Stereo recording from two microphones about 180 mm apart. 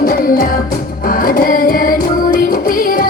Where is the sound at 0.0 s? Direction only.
55° left (ahead or behind).